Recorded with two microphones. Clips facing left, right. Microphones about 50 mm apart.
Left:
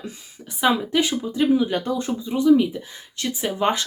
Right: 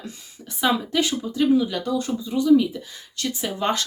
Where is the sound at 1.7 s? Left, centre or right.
Left.